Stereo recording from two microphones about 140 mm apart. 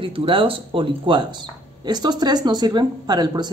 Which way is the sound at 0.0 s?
40° right (ahead or behind).